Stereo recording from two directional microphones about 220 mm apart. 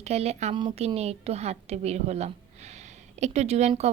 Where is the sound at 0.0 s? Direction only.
30° right (ahead or behind).